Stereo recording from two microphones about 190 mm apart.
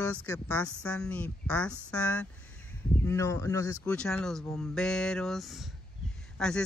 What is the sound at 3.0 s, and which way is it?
Speech, 15° left (ahead or behind).